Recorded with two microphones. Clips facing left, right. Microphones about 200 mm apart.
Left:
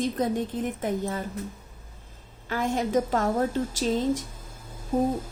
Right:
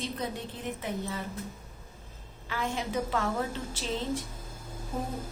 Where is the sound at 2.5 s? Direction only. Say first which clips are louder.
Left 7 dB; 45° left (ahead or behind).